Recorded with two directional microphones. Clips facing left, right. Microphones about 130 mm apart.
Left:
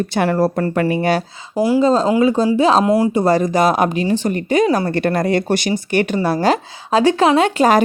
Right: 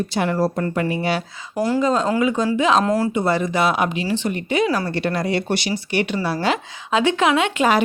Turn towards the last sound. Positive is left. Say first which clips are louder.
# left 5 dB
turn(degrees=40)  # may be behind; listen again after turning